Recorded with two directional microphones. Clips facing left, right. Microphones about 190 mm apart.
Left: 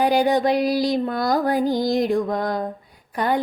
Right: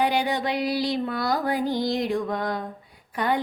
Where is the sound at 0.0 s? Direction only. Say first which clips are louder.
Left 6 dB; 40° left (ahead or behind).